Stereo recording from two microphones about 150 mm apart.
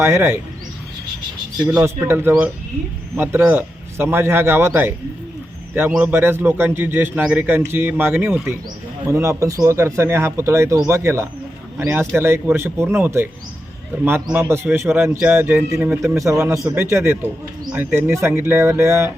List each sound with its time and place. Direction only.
0.0 s a man's voice: 15° right (ahead or behind)
1.8 s a man's voice: 15° right (ahead or behind)
14.3 s a man's voice: 15° right (ahead or behind)